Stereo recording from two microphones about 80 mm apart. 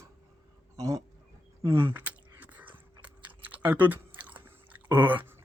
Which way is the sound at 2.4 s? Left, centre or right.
Right.